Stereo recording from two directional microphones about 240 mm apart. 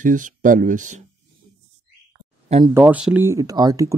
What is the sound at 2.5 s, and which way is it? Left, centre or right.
Speech, centre.